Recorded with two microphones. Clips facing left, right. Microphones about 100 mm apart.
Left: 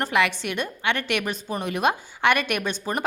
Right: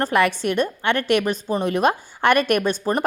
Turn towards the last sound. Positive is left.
turn(degrees=-40)  # may be behind; listen again after turning